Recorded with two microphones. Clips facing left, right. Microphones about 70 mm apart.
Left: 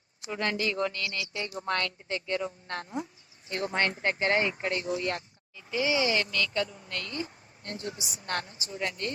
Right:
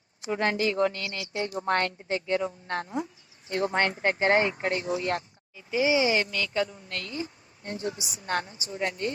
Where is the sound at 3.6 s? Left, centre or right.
Right.